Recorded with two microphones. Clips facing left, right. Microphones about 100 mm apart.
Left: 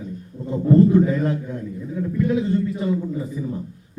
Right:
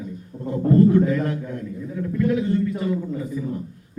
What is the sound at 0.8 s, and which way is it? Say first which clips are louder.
A man's voice: even; 20° left (ahead or behind).